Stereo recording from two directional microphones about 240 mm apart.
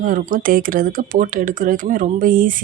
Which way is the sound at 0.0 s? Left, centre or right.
Right.